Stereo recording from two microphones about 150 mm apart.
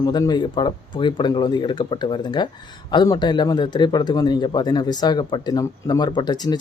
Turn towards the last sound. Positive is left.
turn(degrees=30)  # may be behind; listen again after turning